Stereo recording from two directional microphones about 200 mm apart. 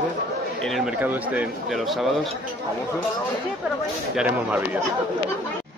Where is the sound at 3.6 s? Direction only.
5° right (ahead or behind).